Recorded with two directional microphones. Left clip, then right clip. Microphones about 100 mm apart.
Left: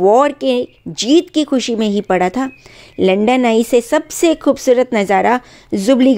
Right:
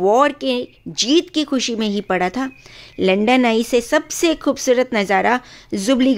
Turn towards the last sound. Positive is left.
turn(degrees=25)  # may be behind; listen again after turning